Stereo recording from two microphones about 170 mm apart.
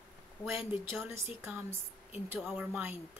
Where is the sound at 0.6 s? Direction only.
30° left (ahead or behind).